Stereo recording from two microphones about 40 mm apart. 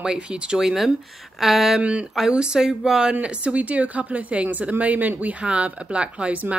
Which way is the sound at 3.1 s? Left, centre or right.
Right.